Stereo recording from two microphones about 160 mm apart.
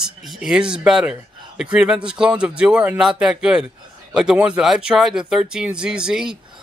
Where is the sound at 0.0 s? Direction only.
Centre (ahead or behind).